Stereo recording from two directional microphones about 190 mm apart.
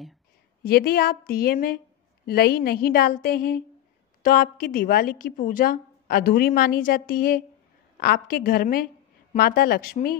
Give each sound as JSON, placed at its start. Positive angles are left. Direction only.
{"t": 0.7, "sound": "a woman's voice", "side_deg": 55}